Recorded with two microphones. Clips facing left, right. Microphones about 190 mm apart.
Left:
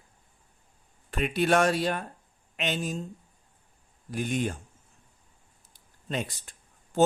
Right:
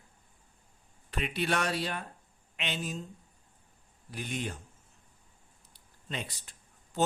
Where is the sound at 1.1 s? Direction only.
45° left (ahead or behind).